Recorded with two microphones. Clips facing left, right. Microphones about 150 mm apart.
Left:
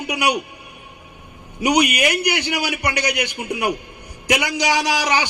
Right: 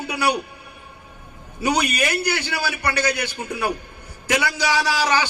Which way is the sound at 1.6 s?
15° left (ahead or behind).